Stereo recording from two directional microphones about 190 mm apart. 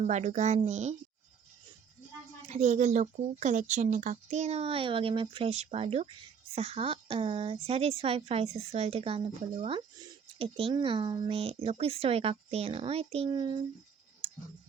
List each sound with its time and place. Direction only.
0.0 s speech: 40° right (ahead or behind)
2.5 s speech: 40° right (ahead or behind)
14.2 s a sound: 30° right (ahead or behind)